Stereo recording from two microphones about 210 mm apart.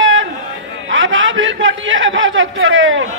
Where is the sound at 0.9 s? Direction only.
65° right (ahead or behind).